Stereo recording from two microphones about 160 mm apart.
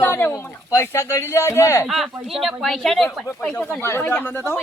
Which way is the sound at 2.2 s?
Centre (ahead or behind).